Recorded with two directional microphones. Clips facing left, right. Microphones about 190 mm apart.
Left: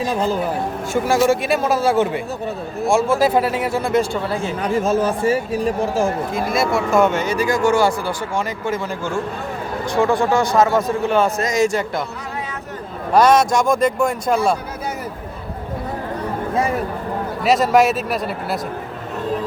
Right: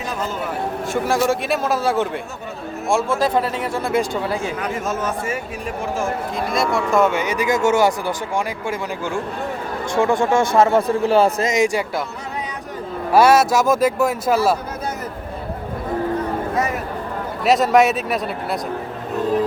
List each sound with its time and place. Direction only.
0.0 s speech: 30° left (ahead or behind)
0.9 s a man's voice: centre (ahead or behind)
4.6 s speech: 30° left (ahead or behind)
6.3 s speech: 5° left (ahead or behind)
7.1 s speech: 15° right (ahead or behind)
9.9 s a man's voice: 25° right (ahead or behind)
11.5 s speech: 15° right (ahead or behind)
13.1 s speech: 5° right (ahead or behind)
17.4 s speech: centre (ahead or behind)